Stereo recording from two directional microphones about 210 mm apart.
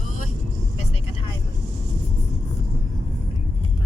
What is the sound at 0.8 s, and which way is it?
Vehicle, 30° left (ahead or behind).